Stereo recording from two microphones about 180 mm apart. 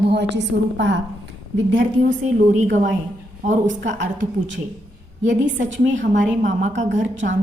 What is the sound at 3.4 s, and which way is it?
Speech, 40° right (ahead or behind).